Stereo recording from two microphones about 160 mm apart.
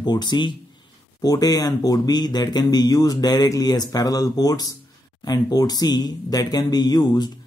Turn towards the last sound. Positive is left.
turn(degrees=25)  # may be behind; listen again after turning